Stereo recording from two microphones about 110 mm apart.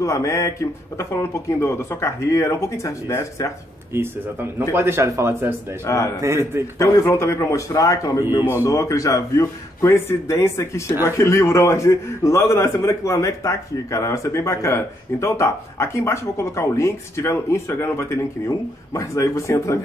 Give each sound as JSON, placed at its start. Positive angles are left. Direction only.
{"t": 0.0, "sound": "a man's voice", "side_deg": 30}
{"t": 4.7, "sound": "speech", "side_deg": -25}
{"t": 5.9, "sound": "a man's voice", "side_deg": 30}
{"t": 6.2, "sound": "speech", "side_deg": -25}
{"t": 6.8, "sound": "a man's voice", "side_deg": 30}